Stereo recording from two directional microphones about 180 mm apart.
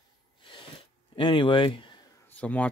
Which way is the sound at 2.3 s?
10° left (ahead or behind).